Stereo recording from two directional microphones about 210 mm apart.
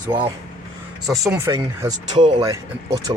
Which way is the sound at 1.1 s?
15° right (ahead or behind).